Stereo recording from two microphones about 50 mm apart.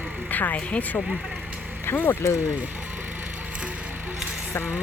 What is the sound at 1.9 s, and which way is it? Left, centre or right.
Speech, left.